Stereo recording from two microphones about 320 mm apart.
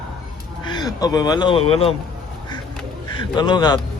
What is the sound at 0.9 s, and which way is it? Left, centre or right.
Speech, centre.